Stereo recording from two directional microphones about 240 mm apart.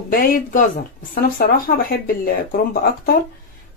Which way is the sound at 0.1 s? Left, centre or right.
Left.